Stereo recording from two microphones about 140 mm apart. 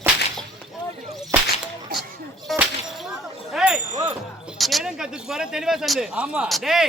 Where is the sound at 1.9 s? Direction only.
90° right.